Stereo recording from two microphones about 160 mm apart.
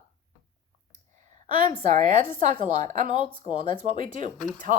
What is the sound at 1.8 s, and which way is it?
Speech, 50° right (ahead or behind).